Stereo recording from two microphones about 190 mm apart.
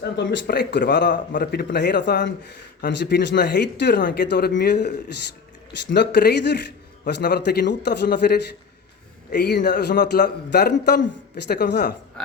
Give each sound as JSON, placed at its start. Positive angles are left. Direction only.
{"t": 0.0, "sound": "a man's voice", "side_deg": 65}